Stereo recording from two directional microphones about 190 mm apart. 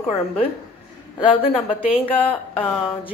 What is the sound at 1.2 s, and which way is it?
A woman's voice, 25° left (ahead or behind).